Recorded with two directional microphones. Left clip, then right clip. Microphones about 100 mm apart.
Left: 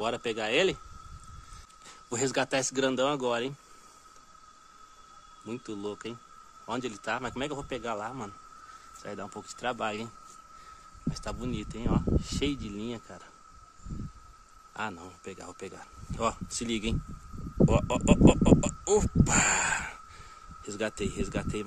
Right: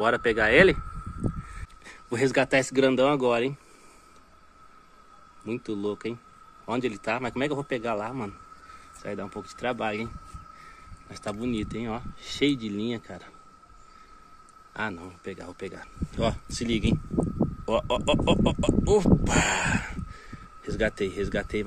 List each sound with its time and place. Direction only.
0.0 s speech: 20° left (ahead or behind)
1.9 s speech: centre (ahead or behind)
5.4 s a man's voice: 5° right (ahead or behind)
14.7 s a man's voice: centre (ahead or behind); by 19.9 s 25° left (ahead or behind)
20.6 s speech: 10° left (ahead or behind)